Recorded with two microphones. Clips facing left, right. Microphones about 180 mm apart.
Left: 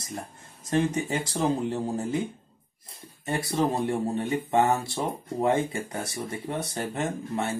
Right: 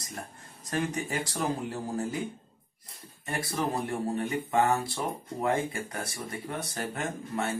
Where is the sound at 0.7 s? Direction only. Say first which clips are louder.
Left 6 dB; 25° left (ahead or behind).